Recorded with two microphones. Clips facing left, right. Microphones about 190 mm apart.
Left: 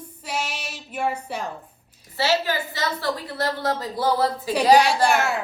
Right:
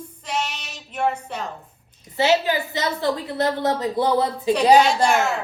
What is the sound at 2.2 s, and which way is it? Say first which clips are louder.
A woman's voice: right 4 dB; 20° right (ahead or behind).